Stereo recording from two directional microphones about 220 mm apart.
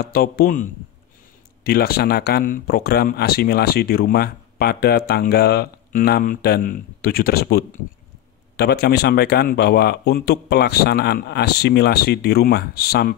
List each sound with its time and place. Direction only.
0.0 s a man's voice: 40° left (ahead or behind)